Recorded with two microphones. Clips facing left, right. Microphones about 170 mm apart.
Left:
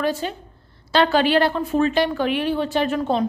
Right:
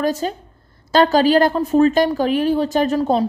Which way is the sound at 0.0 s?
40° right (ahead or behind).